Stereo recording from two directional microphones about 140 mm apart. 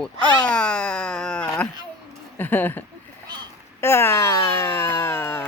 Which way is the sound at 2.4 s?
15° left (ahead or behind).